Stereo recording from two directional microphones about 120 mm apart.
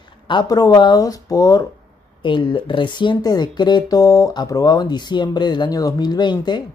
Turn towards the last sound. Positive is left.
turn(degrees=40)  # may be behind; listen again after turning